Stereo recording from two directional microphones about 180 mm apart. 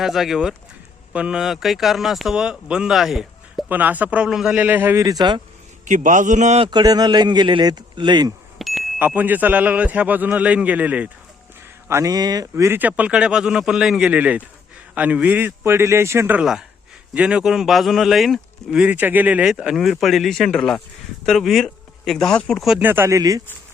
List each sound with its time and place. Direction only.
0.0 s speech: centre (ahead or behind); by 5.4 s 25° right (ahead or behind)
5.8 s a man's voice: 45° right (ahead or behind)
6.7 s a man's voice: 25° right (ahead or behind)
8.5 s wind chime: centre (ahead or behind)
9.0 s speech: 10° right (ahead or behind)